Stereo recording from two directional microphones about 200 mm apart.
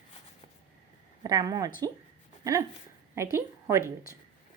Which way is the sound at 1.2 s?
20° right (ahead or behind).